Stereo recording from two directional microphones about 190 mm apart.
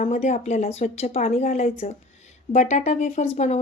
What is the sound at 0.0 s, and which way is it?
A woman's voice, 35° left (ahead or behind).